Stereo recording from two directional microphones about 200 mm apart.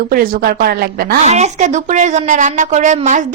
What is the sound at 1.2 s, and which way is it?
A woman's voice, 35° right (ahead or behind).